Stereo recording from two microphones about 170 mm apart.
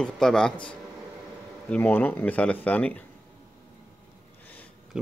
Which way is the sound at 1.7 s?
10° left (ahead or behind).